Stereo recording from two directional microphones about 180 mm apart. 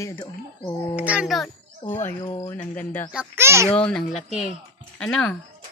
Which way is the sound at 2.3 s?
20° left (ahead or behind).